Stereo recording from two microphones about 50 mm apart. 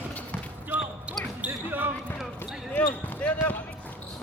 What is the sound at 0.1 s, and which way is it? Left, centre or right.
Basketball bounce, left.